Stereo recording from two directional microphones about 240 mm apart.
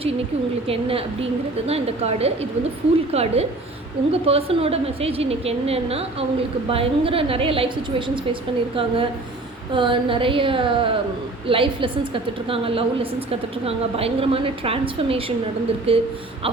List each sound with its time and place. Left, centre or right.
0.7 s a woman's voice: right